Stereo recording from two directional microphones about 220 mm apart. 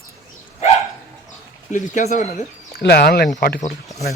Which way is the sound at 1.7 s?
35° left (ahead or behind).